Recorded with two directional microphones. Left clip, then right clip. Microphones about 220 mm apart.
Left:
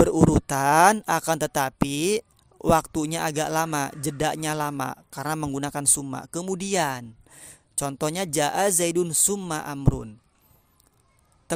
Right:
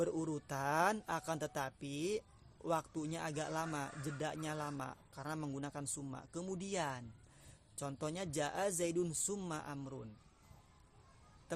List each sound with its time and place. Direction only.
0.0 s speech: 45° left (ahead or behind)